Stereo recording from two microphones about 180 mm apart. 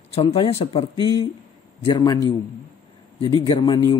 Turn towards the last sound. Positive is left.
turn(degrees=25)  # may be behind; listen again after turning